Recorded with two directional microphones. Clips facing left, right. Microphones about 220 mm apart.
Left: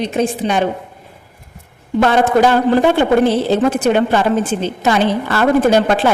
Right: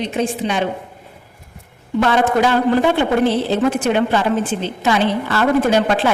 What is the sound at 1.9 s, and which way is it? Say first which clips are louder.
A woman's voice: left 3 dB; 45° left (ahead or behind).